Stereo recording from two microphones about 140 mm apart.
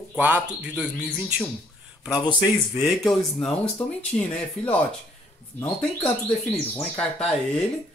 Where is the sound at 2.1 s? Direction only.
30° left (ahead or behind).